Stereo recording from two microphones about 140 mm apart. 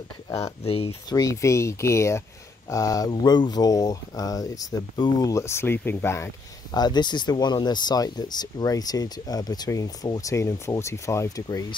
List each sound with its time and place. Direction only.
0.3 s speech: 20° left (ahead or behind)
6.7 s speech: 30° left (ahead or behind)